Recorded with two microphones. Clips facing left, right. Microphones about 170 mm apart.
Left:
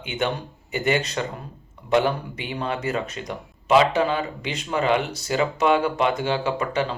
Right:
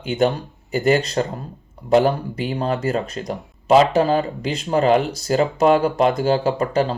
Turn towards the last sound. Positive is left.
turn(degrees=-40)  # may be behind; listen again after turning